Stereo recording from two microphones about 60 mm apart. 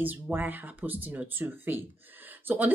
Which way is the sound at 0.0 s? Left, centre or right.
Right.